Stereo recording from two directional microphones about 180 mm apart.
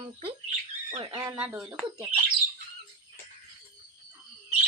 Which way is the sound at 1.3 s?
5° right (ahead or behind).